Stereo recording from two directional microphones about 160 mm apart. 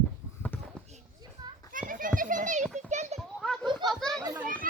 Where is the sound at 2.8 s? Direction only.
45° right (ahead or behind).